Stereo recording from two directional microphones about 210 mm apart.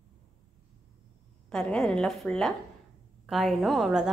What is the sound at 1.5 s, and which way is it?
Speech, centre (ahead or behind).